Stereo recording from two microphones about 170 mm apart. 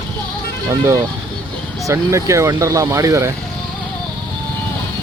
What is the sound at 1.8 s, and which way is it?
Speech, 20° right (ahead or behind).